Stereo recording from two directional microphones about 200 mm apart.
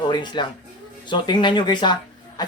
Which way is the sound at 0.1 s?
20° left (ahead or behind).